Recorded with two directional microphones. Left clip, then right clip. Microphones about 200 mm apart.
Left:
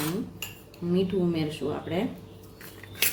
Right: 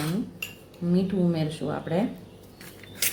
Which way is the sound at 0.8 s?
15° right (ahead or behind).